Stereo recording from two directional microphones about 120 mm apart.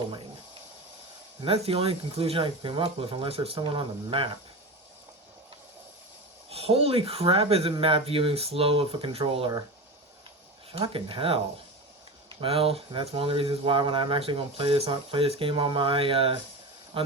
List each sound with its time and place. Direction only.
1.4 s speech: 55° right (ahead or behind)
6.5 s speech: 55° right (ahead or behind)
10.7 s speech: 50° right (ahead or behind)
16.9 s a sound: 50° right (ahead or behind)